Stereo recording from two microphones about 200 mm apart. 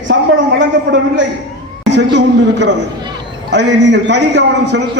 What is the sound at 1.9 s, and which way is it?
A man's voice, 60° right (ahead or behind).